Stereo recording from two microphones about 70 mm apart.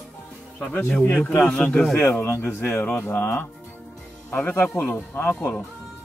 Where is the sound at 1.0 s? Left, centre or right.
Left.